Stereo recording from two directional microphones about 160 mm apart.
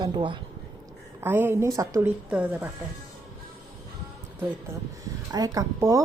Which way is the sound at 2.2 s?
10° right (ahead or behind).